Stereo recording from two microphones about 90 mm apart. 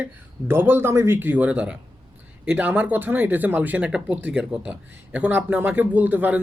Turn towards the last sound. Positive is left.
turn(degrees=-20)  # may be behind; listen again after turning